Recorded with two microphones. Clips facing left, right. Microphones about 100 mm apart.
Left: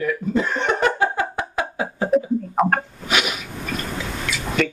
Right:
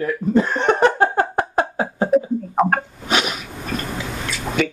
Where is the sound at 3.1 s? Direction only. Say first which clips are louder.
Right 2 dB; 35° right (ahead or behind).